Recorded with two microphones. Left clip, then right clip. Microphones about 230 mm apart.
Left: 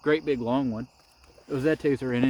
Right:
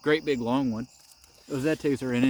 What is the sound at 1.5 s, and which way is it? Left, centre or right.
Speech, right.